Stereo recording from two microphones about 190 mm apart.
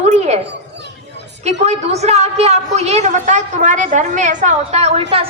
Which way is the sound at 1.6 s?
35° right (ahead or behind).